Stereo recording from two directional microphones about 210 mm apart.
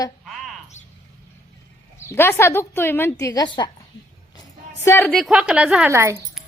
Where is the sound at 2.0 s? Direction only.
10° left (ahead or behind).